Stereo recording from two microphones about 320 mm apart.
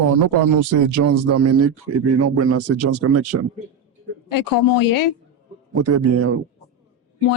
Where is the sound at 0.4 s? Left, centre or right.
Right.